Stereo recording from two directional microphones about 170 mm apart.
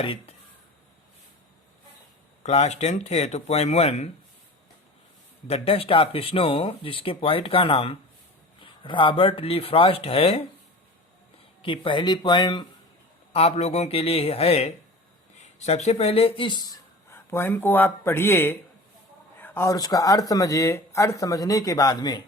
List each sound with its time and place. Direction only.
0.0 s speech: 35° left (ahead or behind)
2.4 s speech: 40° left (ahead or behind)
5.5 s speech: 35° left (ahead or behind)
11.6 s speech: 30° left (ahead or behind)
13.3 s speech: 40° left (ahead or behind)